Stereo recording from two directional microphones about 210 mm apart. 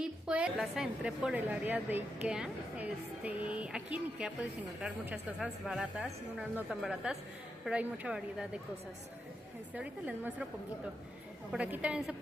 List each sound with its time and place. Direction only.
0.0 s a woman's voice: 5° right (ahead or behind)
9.8 s a woman's voice: 5° right (ahead or behind)
11.5 s a woman's voice: 5° right (ahead or behind)